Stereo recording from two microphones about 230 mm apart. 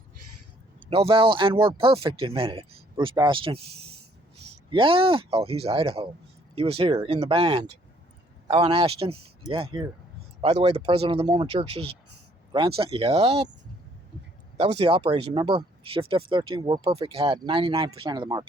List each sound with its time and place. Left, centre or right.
0.9 s speech: right
4.7 s speech: right
14.6 s speech: right